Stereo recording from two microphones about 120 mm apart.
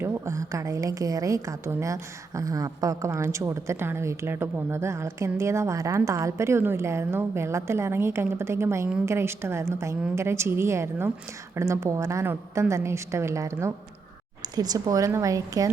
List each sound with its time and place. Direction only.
0.0 s a woman's voice: 20° right (ahead or behind)